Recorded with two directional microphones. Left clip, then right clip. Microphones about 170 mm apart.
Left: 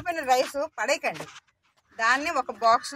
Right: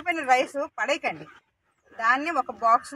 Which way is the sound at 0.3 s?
15° left (ahead or behind).